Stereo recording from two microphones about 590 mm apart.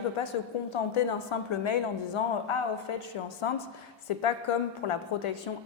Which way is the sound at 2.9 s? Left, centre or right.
Left.